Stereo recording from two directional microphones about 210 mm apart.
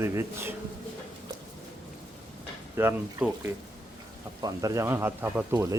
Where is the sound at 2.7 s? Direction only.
10° right (ahead or behind).